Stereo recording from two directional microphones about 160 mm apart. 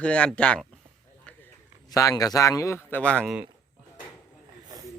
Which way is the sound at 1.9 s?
20° left (ahead or behind).